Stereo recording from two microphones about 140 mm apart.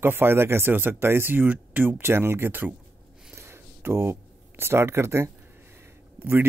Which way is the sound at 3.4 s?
20° right (ahead or behind).